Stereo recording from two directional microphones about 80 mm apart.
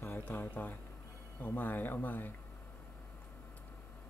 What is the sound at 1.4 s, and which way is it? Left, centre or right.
Speech, left.